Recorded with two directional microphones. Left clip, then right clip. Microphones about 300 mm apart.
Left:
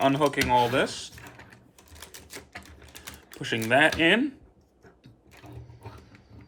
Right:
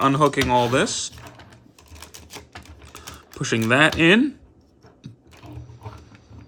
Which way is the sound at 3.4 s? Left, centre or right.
Centre.